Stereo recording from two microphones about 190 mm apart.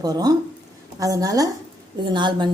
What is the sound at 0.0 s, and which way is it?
A woman's voice, 20° right (ahead or behind).